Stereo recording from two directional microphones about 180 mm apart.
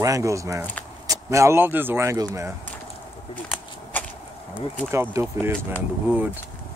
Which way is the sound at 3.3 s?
10° left (ahead or behind).